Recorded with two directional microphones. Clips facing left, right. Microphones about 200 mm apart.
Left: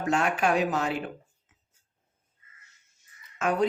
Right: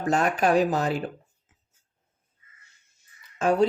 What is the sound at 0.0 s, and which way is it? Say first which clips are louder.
Speech: right 3 dB; 40° right (ahead or behind).